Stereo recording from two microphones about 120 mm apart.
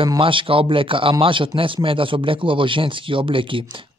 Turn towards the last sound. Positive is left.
turn(degrees=-45)  # may be behind; listen again after turning